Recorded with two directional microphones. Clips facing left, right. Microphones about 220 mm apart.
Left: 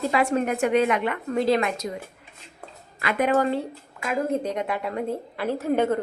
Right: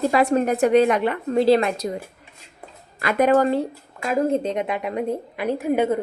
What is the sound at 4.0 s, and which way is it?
A woman's voice, 30° right (ahead or behind).